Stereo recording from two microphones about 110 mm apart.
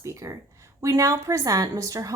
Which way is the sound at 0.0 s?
30° right (ahead or behind).